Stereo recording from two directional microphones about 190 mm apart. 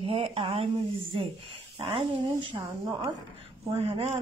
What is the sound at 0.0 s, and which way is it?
Speech, 30° right (ahead or behind).